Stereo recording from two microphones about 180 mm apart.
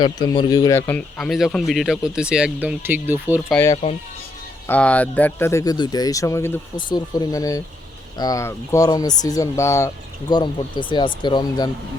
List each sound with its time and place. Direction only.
0.0 s speech: 25° left (ahead or behind); by 3.4 s 10° right (ahead or behind)
3.5 s speech: 15° left (ahead or behind)